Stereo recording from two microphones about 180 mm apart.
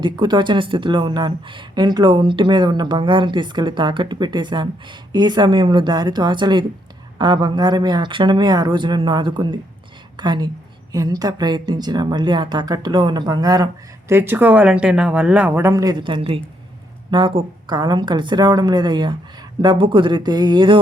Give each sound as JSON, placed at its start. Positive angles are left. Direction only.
{"t": 0.0, "sound": "speech", "side_deg": -25}